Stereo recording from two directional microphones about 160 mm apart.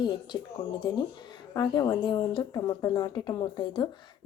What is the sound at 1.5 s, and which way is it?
A woman's voice, 25° left (ahead or behind).